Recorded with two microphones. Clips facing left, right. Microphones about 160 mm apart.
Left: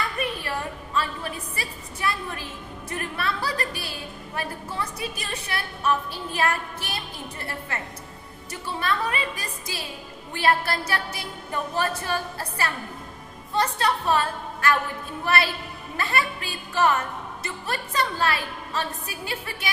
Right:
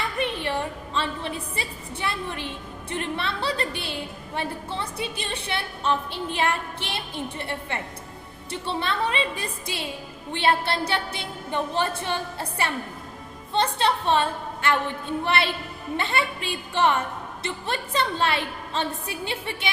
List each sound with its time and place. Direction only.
0.2 s a woman's voice: 25° right (ahead or behind)